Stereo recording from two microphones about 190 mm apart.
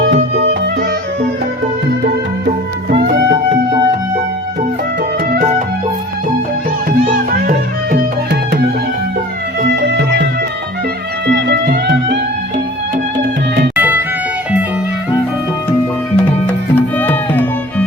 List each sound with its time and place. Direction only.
2.9 s music: 60° right (ahead or behind)
5.3 s music: 40° right (ahead or behind)
9.6 s music: 65° right (ahead or behind)
11.3 s music: 65° right (ahead or behind)
13.7 s music: 10° right (ahead or behind)
16.1 s music: 10° left (ahead or behind)